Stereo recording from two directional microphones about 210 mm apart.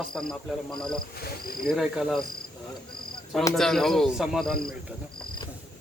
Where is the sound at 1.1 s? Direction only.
45° left (ahead or behind).